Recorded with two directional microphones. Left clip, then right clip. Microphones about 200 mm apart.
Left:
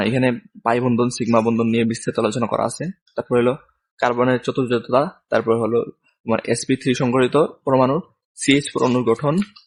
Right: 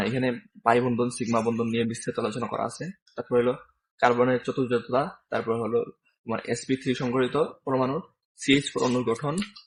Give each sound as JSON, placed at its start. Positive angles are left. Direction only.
{"t": 0.0, "sound": "speech", "side_deg": 45}